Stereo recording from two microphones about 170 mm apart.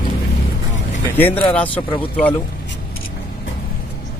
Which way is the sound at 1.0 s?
10° left (ahead or behind).